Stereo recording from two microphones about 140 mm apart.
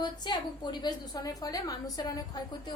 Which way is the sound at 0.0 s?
30° left (ahead or behind).